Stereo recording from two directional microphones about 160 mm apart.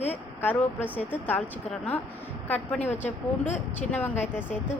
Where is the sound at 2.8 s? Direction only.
45° left (ahead or behind).